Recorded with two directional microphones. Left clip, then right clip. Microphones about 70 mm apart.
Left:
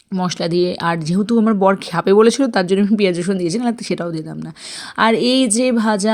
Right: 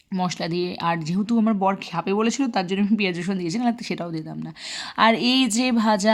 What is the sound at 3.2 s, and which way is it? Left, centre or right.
Speech, left.